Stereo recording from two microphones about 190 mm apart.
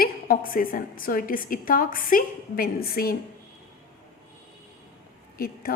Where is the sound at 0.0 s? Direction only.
50° left (ahead or behind).